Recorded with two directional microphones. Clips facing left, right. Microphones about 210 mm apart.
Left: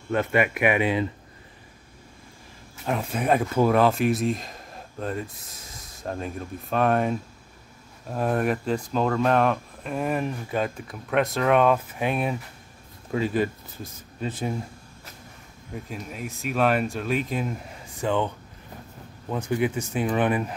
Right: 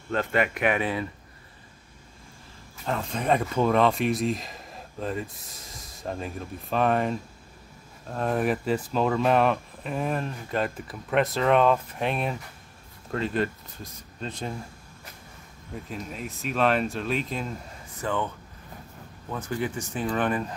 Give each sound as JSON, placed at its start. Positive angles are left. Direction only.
{"t": 0.1, "sound": "speech", "side_deg": 10}
{"t": 2.8, "sound": "speech", "side_deg": 10}
{"t": 15.9, "sound": "speech", "side_deg": 5}
{"t": 18.0, "sound": "speech", "side_deg": 20}